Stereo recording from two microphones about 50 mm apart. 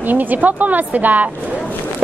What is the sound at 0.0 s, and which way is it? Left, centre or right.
A woman's voice, right.